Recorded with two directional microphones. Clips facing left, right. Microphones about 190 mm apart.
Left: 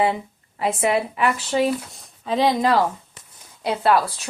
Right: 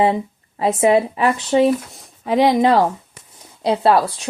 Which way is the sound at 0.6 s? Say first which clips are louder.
Right 6 dB; 35° right (ahead or behind).